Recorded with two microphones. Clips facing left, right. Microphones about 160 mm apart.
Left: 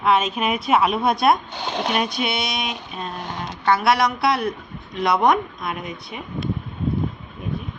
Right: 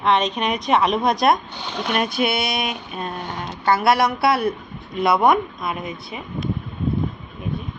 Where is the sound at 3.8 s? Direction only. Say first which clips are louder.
Right 3 dB; 55° right (ahead or behind).